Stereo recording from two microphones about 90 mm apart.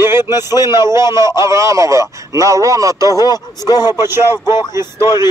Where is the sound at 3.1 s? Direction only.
45° left (ahead or behind).